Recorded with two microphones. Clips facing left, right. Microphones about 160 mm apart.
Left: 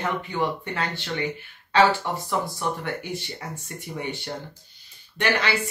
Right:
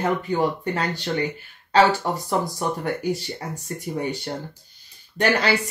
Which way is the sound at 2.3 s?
40° right (ahead or behind).